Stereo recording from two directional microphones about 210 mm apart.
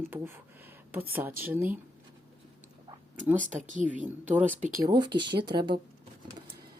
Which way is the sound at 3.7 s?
40° right (ahead or behind).